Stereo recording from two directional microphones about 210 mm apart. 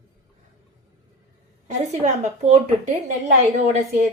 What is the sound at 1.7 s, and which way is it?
A woman's voice, 35° right (ahead or behind).